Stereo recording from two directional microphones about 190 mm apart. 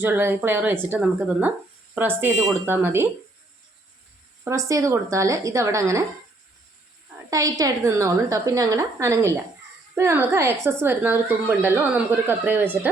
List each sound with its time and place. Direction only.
0.0 s a woman's voice: 10° right (ahead or behind)
4.4 s a woman's voice: 15° right (ahead or behind)
7.3 s a woman's voice: 20° right (ahead or behind)